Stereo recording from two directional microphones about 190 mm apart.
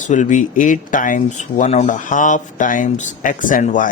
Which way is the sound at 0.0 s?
40° left (ahead or behind).